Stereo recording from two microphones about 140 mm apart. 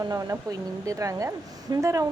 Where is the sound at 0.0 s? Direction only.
25° right (ahead or behind).